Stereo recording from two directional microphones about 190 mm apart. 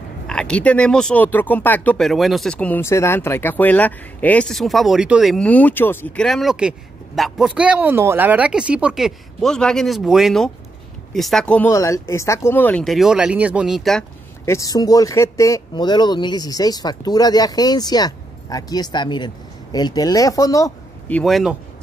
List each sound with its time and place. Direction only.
0.3 s speech: 5° left (ahead or behind)
14.4 s speech: 15° left (ahead or behind)
21.2 s speech: centre (ahead or behind)